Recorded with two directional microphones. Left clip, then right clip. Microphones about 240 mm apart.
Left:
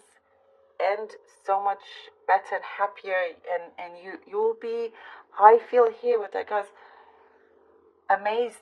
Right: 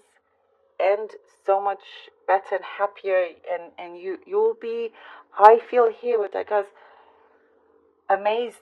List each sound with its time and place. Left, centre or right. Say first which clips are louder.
0.8 s speech: right 5 dB; right
8.1 s speech: right 2 dB; right